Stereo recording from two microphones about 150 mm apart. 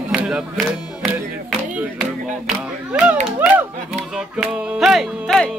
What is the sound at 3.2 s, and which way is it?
Music, 5° right (ahead or behind).